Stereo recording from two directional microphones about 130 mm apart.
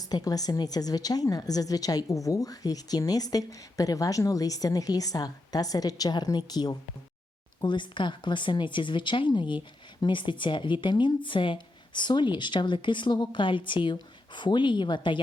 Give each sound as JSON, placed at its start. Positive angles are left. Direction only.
{"t": 0.0, "sound": "a woman's voice", "side_deg": 30}